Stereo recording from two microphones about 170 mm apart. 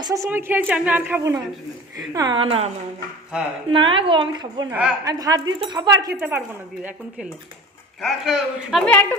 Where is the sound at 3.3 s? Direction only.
5° right (ahead or behind).